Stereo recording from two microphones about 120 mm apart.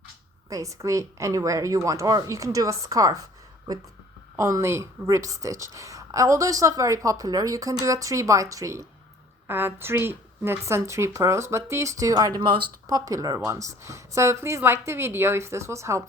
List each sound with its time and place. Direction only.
0.5 s a woman's voice: 25° right (ahead or behind)
4.4 s a woman's voice: 25° right (ahead or behind); by 13.0 s 40° right (ahead or behind)
13.1 s a woman's voice: 30° right (ahead or behind)